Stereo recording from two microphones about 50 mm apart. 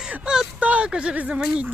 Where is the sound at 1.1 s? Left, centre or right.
Right.